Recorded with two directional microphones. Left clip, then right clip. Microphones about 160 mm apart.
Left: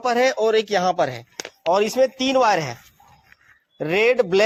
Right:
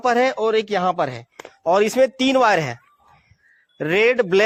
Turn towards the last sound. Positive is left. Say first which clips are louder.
# right 1 dB
turn(degrees=-50)  # may be behind; listen again after turning